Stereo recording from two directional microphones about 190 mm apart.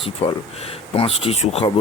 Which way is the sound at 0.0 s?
30° left (ahead or behind).